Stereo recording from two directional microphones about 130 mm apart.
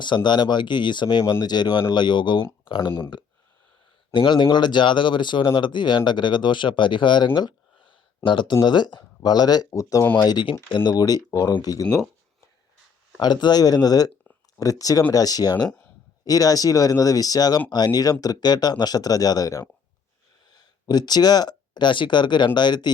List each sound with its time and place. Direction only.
0.0 s speech: 35° left (ahead or behind)
4.1 s speech: 40° left (ahead or behind)
7.3 s a sound: 35° left (ahead or behind)
8.6 s speech: 35° left (ahead or behind)
9.6 s speech: 20° left (ahead or behind)
10.2 s speech: 35° left (ahead or behind)
10.9 s speech: 30° left (ahead or behind)
13.1 s speech: 35° left (ahead or behind)